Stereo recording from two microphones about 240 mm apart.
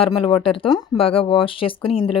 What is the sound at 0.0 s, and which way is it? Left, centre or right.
Speech, left.